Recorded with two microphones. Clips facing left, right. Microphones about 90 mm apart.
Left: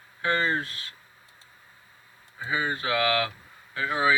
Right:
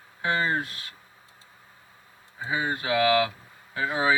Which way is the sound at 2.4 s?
15° right (ahead or behind).